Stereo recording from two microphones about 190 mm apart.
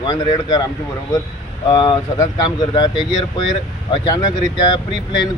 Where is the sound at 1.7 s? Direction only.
25° left (ahead or behind).